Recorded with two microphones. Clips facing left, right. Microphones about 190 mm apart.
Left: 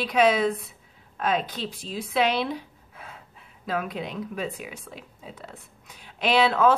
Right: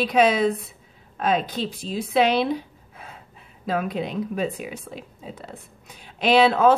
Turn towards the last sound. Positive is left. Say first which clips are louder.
# right 4 dB
turn(degrees=-30)  # may be behind; listen again after turning